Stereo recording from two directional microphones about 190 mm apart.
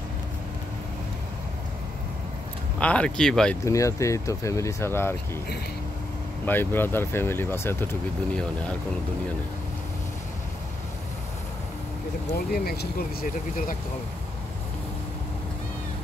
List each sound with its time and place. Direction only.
2.8 s speech: 5° left (ahead or behind)
3.6 s speech: 15° left (ahead or behind)
6.4 s speech: 10° left (ahead or behind)
12.4 s speech: 55° left (ahead or behind)